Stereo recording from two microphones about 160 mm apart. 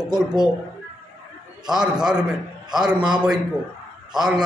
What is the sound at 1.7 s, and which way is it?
A man's voice, 5° right (ahead or behind).